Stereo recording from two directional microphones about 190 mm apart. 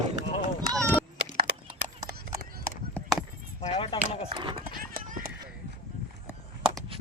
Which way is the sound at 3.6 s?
30° left (ahead or behind).